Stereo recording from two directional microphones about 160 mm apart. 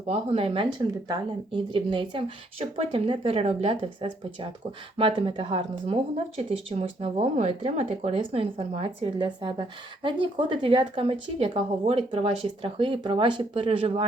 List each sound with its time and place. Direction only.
0.1 s speech: 35° right (ahead or behind)